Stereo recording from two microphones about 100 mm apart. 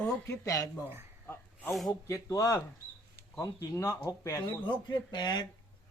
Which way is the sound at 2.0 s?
35° left (ahead or behind).